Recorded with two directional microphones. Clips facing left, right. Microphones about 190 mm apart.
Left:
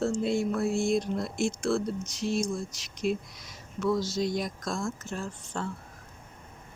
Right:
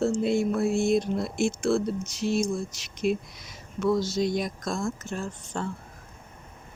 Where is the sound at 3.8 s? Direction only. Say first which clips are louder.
Right 3 dB; 25° right (ahead or behind).